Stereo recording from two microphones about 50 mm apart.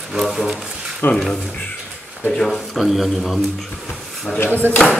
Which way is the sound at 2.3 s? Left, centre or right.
Centre.